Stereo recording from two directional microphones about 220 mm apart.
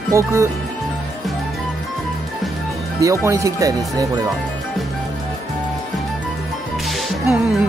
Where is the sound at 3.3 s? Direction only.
15° right (ahead or behind).